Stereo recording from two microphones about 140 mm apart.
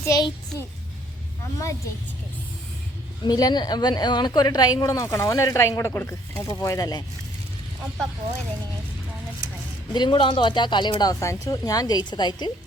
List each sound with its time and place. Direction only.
0.0 s a child's voice: 25° left (ahead or behind)
3.2 s speech: 30° left (ahead or behind)
9.9 s speech: 35° left (ahead or behind)